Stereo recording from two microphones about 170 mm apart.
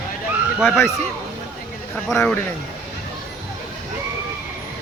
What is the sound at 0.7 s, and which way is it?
Speech, 15° left (ahead or behind).